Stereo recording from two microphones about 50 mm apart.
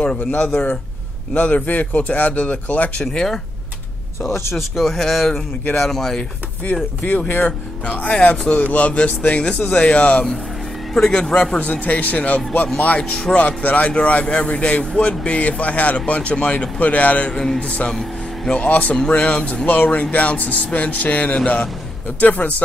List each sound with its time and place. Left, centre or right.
0.0 s speech: left
3.1 s speech: centre
4.2 s speech: left
4.6 s speech: centre
6.6 s speech: left
10.9 s a man's voice: centre
11.1 s speech: left
13.1 s speech: centre
13.4 s speech: left
17.3 s speech: centre
17.6 s speech: left
18.7 s speech: left